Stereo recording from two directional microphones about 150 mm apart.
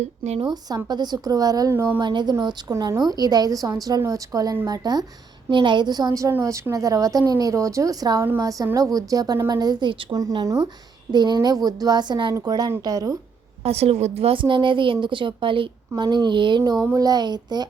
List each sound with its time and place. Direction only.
0.0 s speech: 45° right (ahead or behind)
0.4 s a woman's voice: 25° right (ahead or behind)
2.0 s a woman's voice: 30° right (ahead or behind)
13.7 s a woman's voice: 45° right (ahead or behind)